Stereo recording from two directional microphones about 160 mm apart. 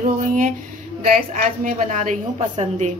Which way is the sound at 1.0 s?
55° right (ahead or behind).